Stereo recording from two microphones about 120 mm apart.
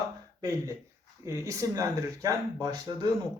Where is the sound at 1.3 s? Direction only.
25° right (ahead or behind).